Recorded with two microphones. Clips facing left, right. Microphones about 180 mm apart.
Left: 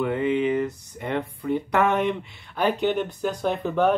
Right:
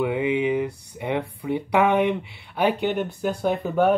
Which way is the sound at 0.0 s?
10° right (ahead or behind).